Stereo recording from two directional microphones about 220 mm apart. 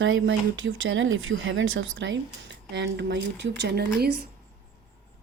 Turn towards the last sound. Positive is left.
turn(degrees=-50)  # may be behind; listen again after turning